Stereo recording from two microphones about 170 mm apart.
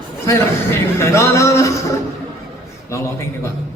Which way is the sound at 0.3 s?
15° left (ahead or behind).